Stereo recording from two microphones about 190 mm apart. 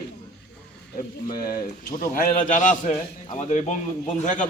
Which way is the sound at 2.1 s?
45° left (ahead or behind).